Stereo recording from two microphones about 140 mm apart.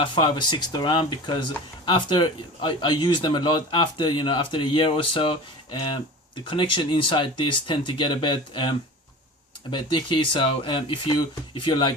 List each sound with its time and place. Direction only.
0.0 s speech: 35° left (ahead or behind)